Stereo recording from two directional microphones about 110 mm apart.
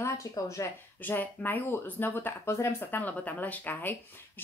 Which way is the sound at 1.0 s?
15° left (ahead or behind).